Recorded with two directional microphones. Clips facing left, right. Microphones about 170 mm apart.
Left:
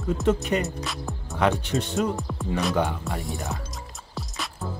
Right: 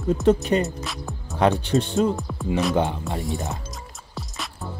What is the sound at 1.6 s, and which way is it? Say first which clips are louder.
Speech: right 5 dB; 35° right (ahead or behind).